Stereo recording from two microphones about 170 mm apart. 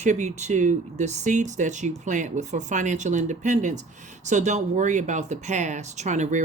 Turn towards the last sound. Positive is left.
turn(degrees=-45)  # may be behind; listen again after turning